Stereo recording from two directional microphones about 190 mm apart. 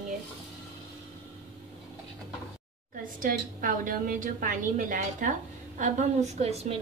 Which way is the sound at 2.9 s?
45° right (ahead or behind).